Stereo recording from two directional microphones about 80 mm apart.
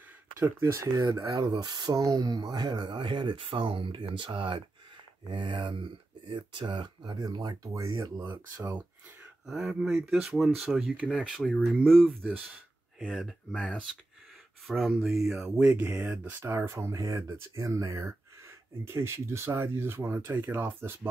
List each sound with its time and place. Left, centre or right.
0.4 s speech: right
0.9 s speech: right
7.2 s speech: right
9.5 s speech: centre
13.6 s speech: centre
14.7 s speech: centre
15.4 s speech: centre
16.4 s speech: right